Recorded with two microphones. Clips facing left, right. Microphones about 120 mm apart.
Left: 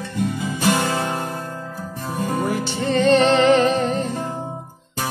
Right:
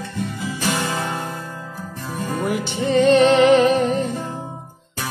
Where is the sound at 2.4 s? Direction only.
10° right (ahead or behind).